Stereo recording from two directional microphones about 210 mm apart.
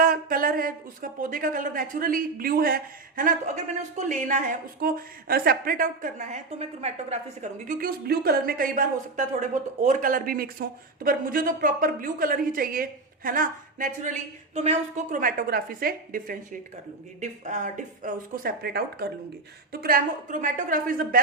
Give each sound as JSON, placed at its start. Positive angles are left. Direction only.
{"t": 0.0, "sound": "a woman's voice", "side_deg": -40}